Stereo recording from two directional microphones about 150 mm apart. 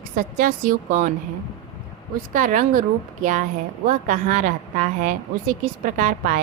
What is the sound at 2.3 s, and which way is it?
A woman's voice, 60° right (ahead or behind).